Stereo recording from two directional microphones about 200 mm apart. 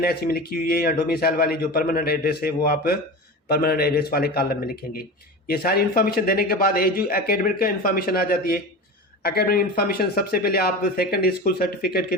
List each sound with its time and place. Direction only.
0.0 s speech: 50° left (ahead or behind)